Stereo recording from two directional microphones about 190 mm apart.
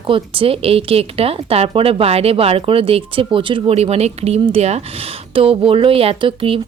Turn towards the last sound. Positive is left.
turn(degrees=-30)  # may be behind; listen again after turning